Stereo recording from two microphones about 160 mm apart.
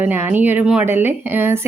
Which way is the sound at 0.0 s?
10° right (ahead or behind).